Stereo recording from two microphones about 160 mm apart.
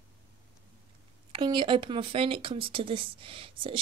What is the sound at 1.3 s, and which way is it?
Speech, 30° right (ahead or behind).